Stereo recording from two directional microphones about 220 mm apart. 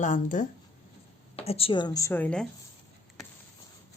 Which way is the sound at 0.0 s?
35° left (ahead or behind).